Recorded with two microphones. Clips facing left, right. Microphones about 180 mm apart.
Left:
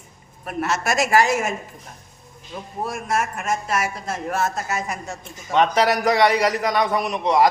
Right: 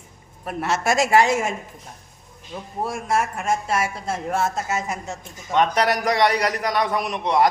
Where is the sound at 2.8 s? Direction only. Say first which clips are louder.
Right 1 dB; 30° right (ahead or behind).